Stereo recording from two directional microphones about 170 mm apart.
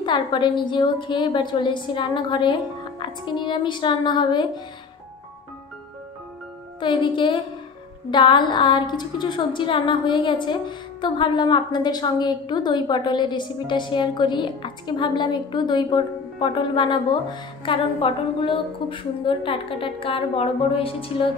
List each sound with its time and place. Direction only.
0.0 s a woman's voice: 25° left (ahead or behind)
6.8 s a woman's voice: 30° left (ahead or behind)